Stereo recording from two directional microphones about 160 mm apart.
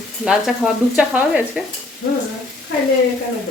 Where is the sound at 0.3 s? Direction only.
5° right (ahead or behind).